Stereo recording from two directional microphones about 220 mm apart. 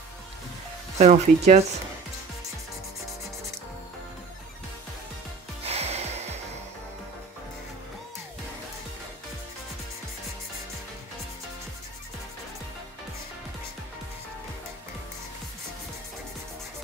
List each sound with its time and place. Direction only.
0.9 s speech: 30° right (ahead or behind)
5.7 s music: 30° right (ahead or behind)